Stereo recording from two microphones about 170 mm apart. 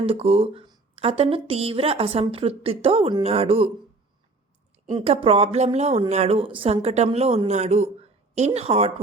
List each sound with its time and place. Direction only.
0.0 s speech: 35° right (ahead or behind)
5.1 s speech: 35° right (ahead or behind)